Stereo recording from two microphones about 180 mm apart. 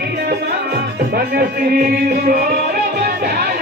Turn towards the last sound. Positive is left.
turn(degrees=-60)  # may be behind; listen again after turning